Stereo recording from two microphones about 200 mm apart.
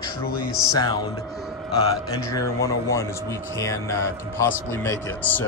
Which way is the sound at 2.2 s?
15° left (ahead or behind).